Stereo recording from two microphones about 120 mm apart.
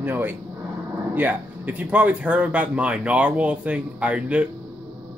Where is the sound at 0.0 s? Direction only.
15° right (ahead or behind).